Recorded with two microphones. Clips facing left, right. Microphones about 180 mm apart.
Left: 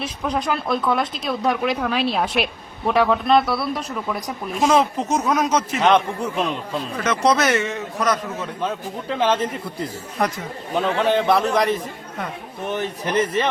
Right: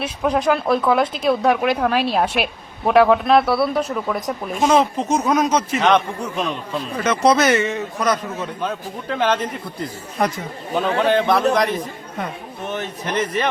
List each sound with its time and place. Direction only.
0.0 s speech: 5° right (ahead or behind)
7.0 s speech: 5° right (ahead or behind)